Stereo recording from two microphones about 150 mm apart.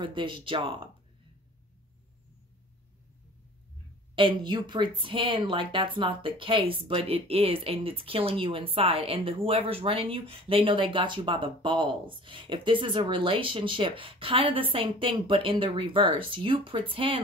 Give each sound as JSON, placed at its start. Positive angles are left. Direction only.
{"t": 0.0, "sound": "a woman's voice", "side_deg": -30}
{"t": 4.1, "sound": "a woman's voice", "side_deg": -35}